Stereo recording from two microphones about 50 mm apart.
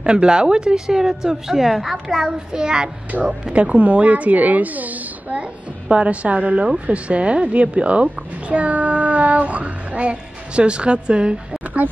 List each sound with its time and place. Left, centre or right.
0.0 s speech: centre
2.3 s a woman's voice: centre
11.6 s speech: right